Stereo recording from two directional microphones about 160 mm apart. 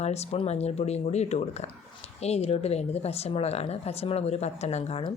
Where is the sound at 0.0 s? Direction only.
40° left (ahead or behind).